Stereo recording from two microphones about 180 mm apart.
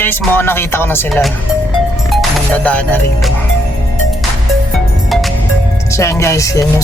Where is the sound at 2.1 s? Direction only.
5° left (ahead or behind).